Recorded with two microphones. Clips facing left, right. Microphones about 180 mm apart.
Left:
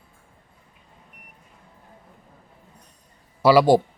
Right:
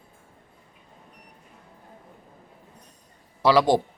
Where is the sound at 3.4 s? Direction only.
5° left (ahead or behind).